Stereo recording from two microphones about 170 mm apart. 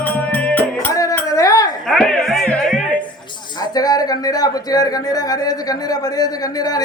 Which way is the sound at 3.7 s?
20° left (ahead or behind).